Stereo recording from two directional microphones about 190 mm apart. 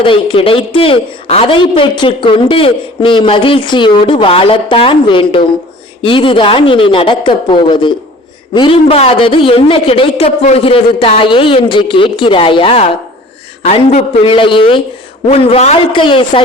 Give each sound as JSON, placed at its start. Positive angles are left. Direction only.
{"t": 0.0, "sound": "speech", "side_deg": 25}